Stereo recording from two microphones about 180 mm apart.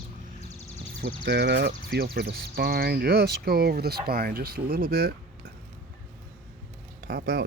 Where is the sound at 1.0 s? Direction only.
65° right (ahead or behind).